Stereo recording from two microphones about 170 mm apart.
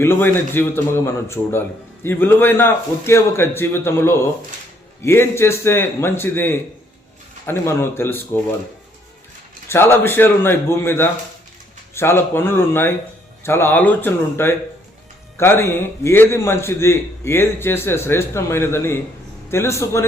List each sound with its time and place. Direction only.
0.0 s a man's voice: 15° left (ahead or behind)
9.6 s a man's voice: 15° left (ahead or behind)